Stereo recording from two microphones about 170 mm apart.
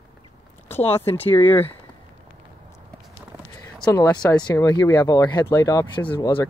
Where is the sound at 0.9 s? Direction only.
15° left (ahead or behind).